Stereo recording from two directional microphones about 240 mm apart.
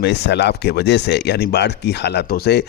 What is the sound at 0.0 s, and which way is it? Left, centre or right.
Speech, left.